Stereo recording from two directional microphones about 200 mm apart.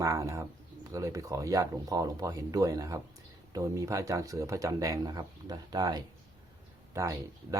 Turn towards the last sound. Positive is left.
turn(degrees=-15)  # may be behind; listen again after turning